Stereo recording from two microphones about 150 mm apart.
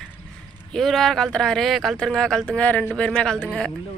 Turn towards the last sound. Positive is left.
turn(degrees=5)  # may be behind; listen again after turning